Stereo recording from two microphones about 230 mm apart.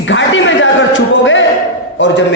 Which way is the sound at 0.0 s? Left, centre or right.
Left.